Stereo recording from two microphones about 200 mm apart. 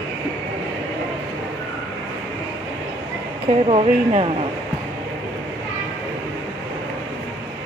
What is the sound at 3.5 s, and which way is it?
Speech, 30° right (ahead or behind).